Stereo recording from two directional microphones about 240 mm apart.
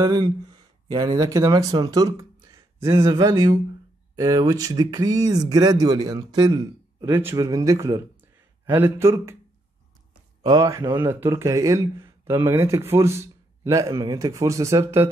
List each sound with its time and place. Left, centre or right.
0.0 s speech: centre
10.4 s speech: centre